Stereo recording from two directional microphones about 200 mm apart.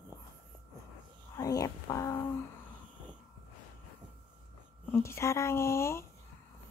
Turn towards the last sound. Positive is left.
turn(degrees=15)  # may be behind; listen again after turning